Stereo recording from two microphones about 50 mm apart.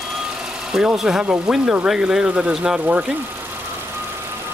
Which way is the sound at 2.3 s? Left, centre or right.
Right.